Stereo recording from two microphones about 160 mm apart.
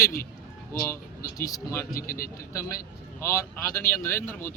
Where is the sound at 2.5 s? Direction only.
20° left (ahead or behind).